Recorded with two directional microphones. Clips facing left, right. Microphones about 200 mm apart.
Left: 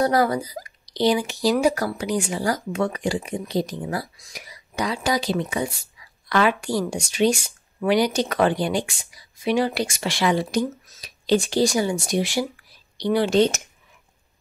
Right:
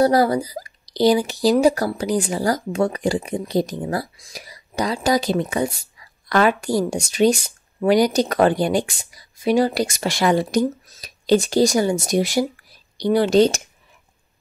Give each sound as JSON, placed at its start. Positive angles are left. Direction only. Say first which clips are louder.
{"t": 0.0, "sound": "speech", "louder": "right 4 dB", "side_deg": -35}